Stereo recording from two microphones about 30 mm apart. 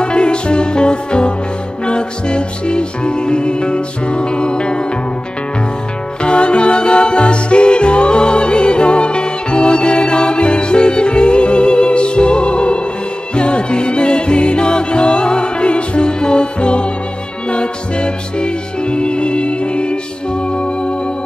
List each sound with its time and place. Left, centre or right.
0.0 s music: left
6.2 s music: left